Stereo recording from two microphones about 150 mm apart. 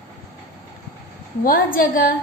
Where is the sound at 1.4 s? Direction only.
70° left (ahead or behind).